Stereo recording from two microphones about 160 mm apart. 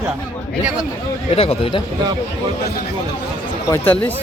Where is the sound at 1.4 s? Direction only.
35° left (ahead or behind).